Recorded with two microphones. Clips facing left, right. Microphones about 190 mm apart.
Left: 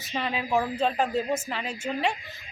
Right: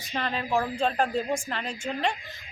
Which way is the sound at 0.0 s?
5° left (ahead or behind).